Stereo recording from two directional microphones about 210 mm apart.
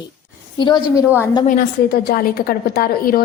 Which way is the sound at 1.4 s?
45° left (ahead or behind).